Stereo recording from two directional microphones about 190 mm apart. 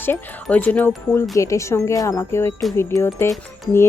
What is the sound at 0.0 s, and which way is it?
Speech, 10° left (ahead or behind).